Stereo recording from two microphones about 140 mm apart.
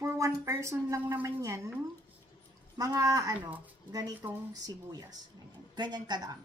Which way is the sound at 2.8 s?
25° right (ahead or behind).